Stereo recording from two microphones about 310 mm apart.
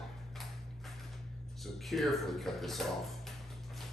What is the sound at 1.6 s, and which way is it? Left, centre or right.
Speech, centre.